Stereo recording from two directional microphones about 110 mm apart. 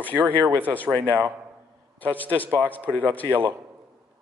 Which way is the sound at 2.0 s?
15° left (ahead or behind).